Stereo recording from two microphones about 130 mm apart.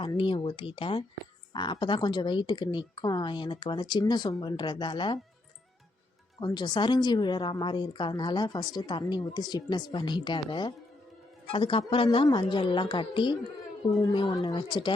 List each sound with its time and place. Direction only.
0.0 s a woman's voice: 40° left (ahead or behind)
6.4 s a woman's voice: 35° left (ahead or behind)